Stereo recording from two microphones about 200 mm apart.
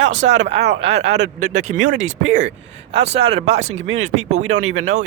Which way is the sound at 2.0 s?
70° right (ahead or behind).